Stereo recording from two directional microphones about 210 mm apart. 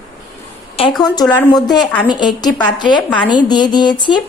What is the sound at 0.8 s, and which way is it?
Speech, 25° left (ahead or behind).